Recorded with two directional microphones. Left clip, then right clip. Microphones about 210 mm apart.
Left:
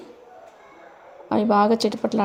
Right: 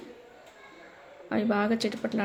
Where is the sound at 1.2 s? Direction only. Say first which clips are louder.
Left 9 dB; 25° left (ahead or behind).